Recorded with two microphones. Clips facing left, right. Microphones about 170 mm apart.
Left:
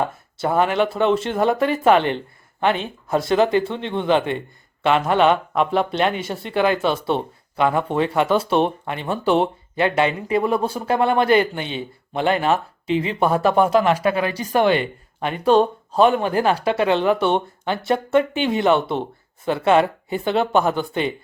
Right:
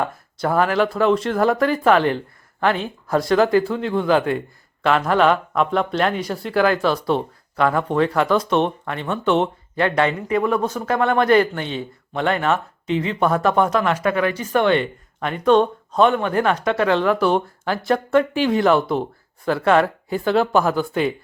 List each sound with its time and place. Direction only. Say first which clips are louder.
0.0 s speech: even; 25° left (ahead or behind)
0.9 s speech: right 1 dB; centre (ahead or behind)
7.5 s speech: even; 25° left (ahead or behind)
7.8 s speech: right 1 dB; 5° left (ahead or behind)
8.8 s speech: even; 25° left (ahead or behind)
14.5 s speech: left 1 dB; 10° left (ahead or behind)
15.2 s speech: even; 30° left (ahead or behind)
17.1 s speech: even; centre (ahead or behind)